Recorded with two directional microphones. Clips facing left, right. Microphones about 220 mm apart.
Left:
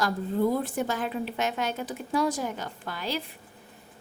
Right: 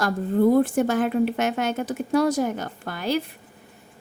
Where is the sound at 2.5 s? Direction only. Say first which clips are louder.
Right 5 dB; 50° right (ahead or behind).